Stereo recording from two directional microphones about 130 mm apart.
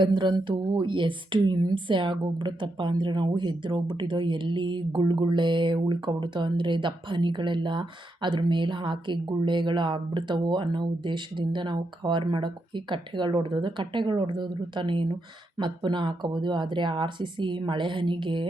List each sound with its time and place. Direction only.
0.0 s speech: 35° right (ahead or behind)